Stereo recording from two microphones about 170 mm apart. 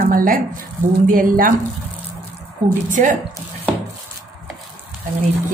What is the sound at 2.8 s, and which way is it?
Speech, 50° right (ahead or behind).